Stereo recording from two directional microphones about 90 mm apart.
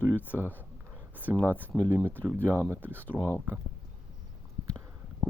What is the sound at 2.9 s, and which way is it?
Speech, 20° left (ahead or behind).